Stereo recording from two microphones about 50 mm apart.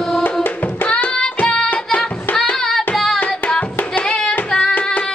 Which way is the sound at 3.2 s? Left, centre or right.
Left.